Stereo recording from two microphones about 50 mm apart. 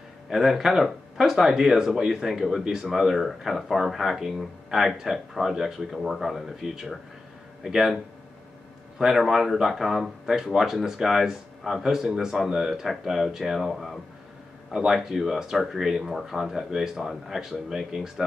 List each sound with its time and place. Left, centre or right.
0.3 s a man's voice: centre